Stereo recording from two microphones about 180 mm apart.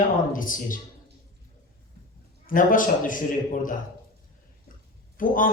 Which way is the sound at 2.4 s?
50° left (ahead or behind).